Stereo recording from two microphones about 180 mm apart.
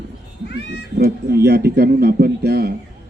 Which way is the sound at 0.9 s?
65° right (ahead or behind).